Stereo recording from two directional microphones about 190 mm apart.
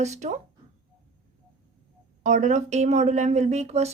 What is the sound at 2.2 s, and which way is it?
A woman's voice, 40° right (ahead or behind).